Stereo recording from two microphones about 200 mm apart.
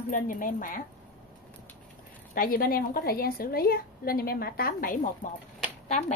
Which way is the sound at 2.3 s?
45° left (ahead or behind).